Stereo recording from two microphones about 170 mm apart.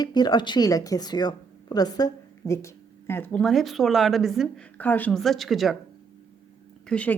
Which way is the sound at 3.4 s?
Centre (ahead or behind).